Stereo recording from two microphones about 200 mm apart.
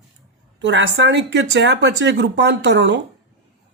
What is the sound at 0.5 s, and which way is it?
Speech, 65° right (ahead or behind).